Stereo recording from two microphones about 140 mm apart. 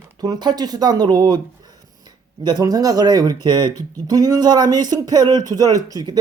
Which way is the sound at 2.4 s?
30° right (ahead or behind).